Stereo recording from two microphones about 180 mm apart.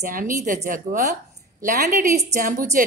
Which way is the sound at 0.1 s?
50° right (ahead or behind).